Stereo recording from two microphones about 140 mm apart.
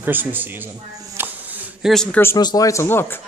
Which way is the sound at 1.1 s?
15° right (ahead or behind).